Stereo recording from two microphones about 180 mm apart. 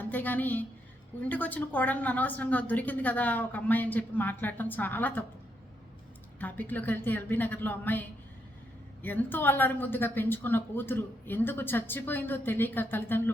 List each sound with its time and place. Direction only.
0.0 s a woman's voice: 10° left (ahead or behind)
6.4 s a woman's voice: 10° left (ahead or behind)